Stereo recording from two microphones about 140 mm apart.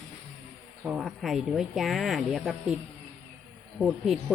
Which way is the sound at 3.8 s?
Centre (ahead or behind).